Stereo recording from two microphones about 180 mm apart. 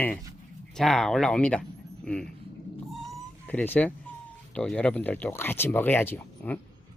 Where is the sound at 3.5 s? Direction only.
10° left (ahead or behind).